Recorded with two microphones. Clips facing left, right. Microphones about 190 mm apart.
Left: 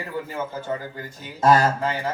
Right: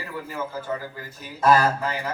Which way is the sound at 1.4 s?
25° left (ahead or behind).